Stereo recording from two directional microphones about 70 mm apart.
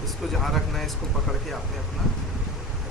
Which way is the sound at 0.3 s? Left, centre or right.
Centre.